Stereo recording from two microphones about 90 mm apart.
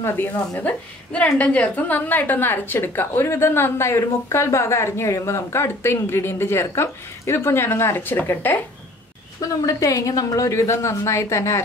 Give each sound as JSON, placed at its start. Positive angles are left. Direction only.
{"t": 0.6, "sound": "a woman's voice", "side_deg": 15}
{"t": 9.4, "sound": "a woman's voice", "side_deg": 40}